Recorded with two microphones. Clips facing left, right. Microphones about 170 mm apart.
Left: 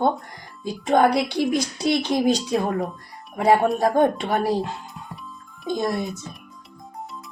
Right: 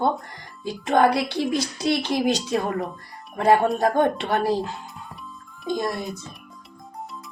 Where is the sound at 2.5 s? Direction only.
Centre (ahead or behind).